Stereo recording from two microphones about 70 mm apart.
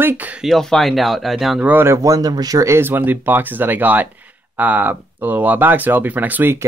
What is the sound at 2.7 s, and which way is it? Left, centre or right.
Speech, right.